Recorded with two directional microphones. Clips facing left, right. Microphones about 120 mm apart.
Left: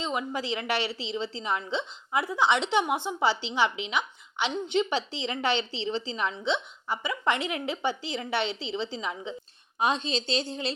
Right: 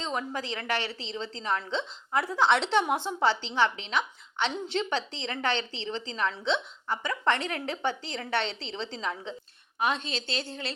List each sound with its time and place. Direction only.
0.0 s a woman's voice: 10° left (ahead or behind)
9.7 s a woman's voice: 20° left (ahead or behind)